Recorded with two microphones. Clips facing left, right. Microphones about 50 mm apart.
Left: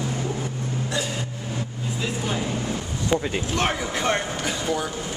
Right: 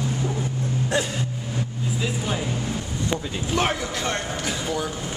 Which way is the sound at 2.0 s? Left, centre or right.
Centre.